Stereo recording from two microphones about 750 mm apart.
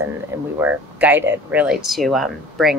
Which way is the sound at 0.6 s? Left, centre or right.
Centre.